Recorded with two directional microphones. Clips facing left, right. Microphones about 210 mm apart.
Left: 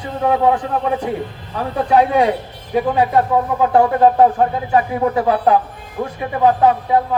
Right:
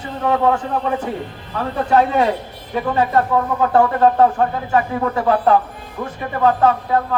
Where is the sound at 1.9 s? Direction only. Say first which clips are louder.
Left 2 dB; 15° left (ahead or behind).